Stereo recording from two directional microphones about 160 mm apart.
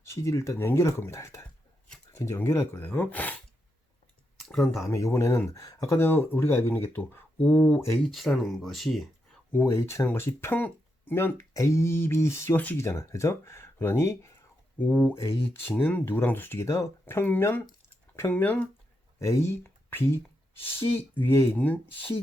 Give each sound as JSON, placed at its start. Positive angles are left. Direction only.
{"t": 0.1, "sound": "speech", "side_deg": 20}
{"t": 4.4, "sound": "speech", "side_deg": 0}
{"t": 4.9, "sound": "speech", "side_deg": 15}
{"t": 8.1, "sound": "speech", "side_deg": 0}
{"t": 9.5, "sound": "speech", "side_deg": 15}